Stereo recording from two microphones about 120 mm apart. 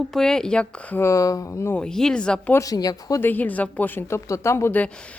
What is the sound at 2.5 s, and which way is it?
Speech, 30° left (ahead or behind).